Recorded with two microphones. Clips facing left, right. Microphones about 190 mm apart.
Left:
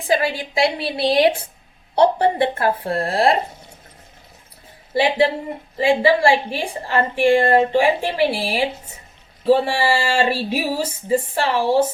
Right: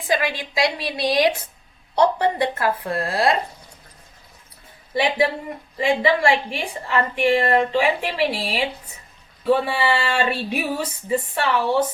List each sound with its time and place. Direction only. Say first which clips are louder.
0.1 s a woman's voice: left 3 dB; 30° left (ahead or behind)
4.9 s a woman's voice: left 3 dB; 30° left (ahead or behind)